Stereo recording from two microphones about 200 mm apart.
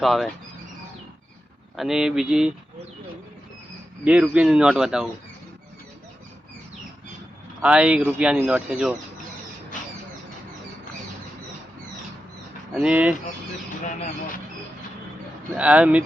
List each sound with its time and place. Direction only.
0.0 s speech: centre (ahead or behind)
1.7 s speech: centre (ahead or behind)
4.0 s speech: 5° right (ahead or behind)
7.6 s speech: 5° right (ahead or behind)
12.7 s speech: 5° right (ahead or behind)
13.8 s speech: 45° left (ahead or behind)
15.5 s speech: 5° right (ahead or behind)